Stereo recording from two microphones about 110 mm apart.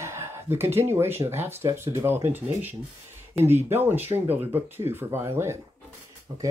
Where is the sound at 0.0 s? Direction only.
25° right (ahead or behind).